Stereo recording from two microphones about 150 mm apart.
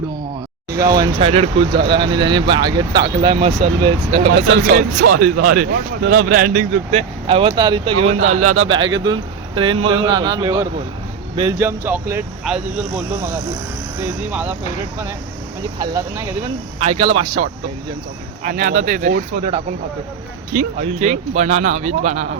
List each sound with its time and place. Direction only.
0.7 s speech: 25° right (ahead or behind)
1.2 s speech: 40° right (ahead or behind)
4.6 s speech: 60° right (ahead or behind)
6.9 s speech: 40° right (ahead or behind)
11.5 s speech: 15° right (ahead or behind)
15.8 s speech: 25° right (ahead or behind)
16.8 s speech: 50° right (ahead or behind)